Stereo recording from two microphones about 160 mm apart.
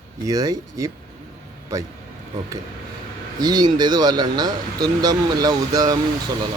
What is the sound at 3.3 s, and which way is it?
Speech, 25° right (ahead or behind).